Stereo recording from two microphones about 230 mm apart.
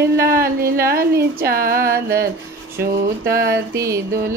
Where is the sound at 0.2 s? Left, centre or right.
Right.